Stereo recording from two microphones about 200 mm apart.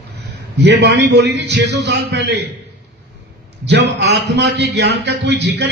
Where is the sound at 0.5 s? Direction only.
60° right (ahead or behind).